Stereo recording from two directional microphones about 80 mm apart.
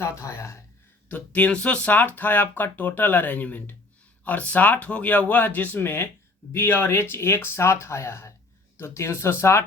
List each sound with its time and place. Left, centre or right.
0.0 s speech: left
1.0 s speech: centre